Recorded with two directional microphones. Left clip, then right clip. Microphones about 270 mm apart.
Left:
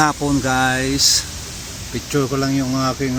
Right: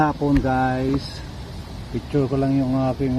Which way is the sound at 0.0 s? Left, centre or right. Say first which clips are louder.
Left 3 dB; left.